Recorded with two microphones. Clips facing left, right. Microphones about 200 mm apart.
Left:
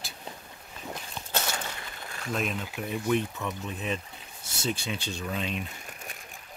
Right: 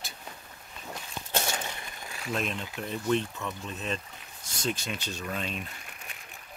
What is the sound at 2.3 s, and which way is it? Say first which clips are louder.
Speech: left 1 dB; 5° left (ahead or behind).